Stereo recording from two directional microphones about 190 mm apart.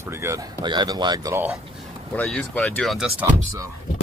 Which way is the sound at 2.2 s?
5° left (ahead or behind).